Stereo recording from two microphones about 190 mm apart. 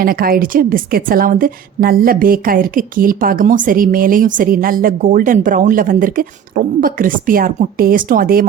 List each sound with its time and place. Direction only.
0.0 s a woman's voice: 50° right (ahead or behind)